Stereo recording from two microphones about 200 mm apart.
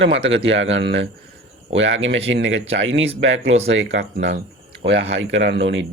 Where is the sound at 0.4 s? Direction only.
70° right (ahead or behind).